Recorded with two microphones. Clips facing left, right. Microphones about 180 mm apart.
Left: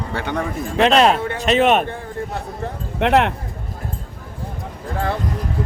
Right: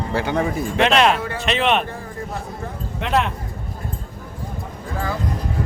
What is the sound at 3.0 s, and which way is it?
Speech, 65° left (ahead or behind).